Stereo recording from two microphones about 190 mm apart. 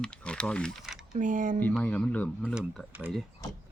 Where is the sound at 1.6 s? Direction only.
10° left (ahead or behind); by 3.1 s 10° right (ahead or behind).